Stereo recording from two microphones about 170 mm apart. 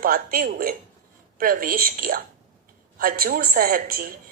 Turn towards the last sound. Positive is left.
turn(degrees=-60)  # may be behind; listen again after turning